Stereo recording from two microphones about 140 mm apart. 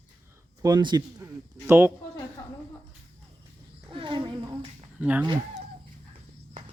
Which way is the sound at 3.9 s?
35° right (ahead or behind).